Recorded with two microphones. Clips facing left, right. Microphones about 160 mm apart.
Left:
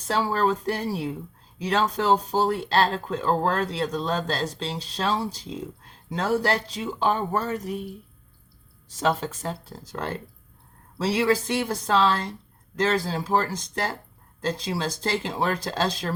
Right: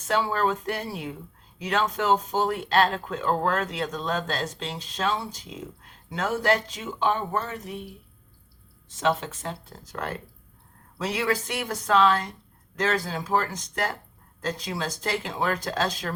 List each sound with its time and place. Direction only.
0.0 s speech: 35° left (ahead or behind)
8.9 s speech: 40° left (ahead or behind)